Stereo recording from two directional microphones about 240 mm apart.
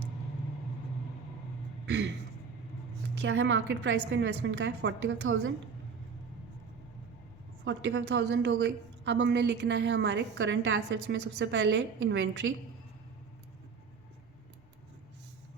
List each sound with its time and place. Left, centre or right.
1.9 s a sound: right
3.2 s a woman's voice: right
7.6 s a woman's voice: right